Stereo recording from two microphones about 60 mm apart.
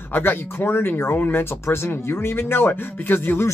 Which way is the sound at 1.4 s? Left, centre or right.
Left.